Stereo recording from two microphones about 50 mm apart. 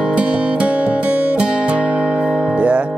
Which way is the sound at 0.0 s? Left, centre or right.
Right.